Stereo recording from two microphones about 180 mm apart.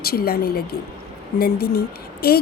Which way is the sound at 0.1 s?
60° left (ahead or behind).